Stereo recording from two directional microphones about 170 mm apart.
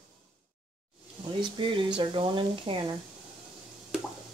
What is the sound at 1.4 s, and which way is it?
Speech, 30° right (ahead or behind).